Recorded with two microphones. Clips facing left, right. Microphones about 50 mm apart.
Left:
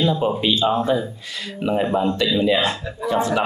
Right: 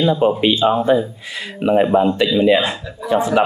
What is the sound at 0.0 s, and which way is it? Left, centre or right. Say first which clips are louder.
Speech: right 5 dB; centre.